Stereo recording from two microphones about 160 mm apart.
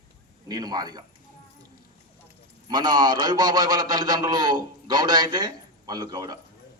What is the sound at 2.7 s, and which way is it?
A man's voice, 25° right (ahead or behind).